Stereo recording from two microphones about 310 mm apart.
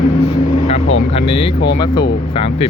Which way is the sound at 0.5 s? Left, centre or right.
Left.